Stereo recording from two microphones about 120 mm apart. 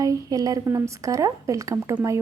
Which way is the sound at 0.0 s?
30° right (ahead or behind).